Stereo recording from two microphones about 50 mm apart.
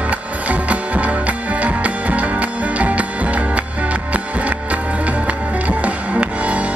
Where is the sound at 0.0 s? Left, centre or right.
Right.